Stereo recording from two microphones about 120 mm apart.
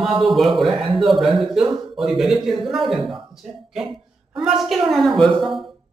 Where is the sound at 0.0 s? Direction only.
Centre (ahead or behind).